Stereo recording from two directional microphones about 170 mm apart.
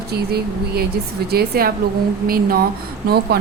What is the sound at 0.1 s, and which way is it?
A woman's voice, 70° right (ahead or behind).